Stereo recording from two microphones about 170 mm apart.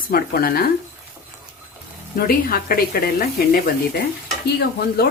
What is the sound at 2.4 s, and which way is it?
A woman's voice, 60° left (ahead or behind).